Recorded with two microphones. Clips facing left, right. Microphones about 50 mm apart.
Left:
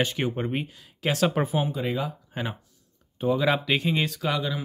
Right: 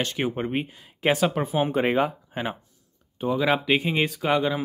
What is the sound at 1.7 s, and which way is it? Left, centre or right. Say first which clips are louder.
Speech: right 6 dB; right.